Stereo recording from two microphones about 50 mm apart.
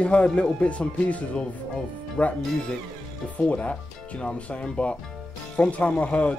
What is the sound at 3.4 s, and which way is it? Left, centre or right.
Speech, left.